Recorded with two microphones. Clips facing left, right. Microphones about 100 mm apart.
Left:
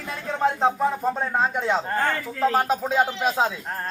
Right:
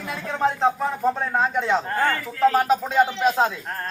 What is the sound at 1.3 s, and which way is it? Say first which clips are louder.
A man's voice: right 1 dB; 5° left (ahead or behind).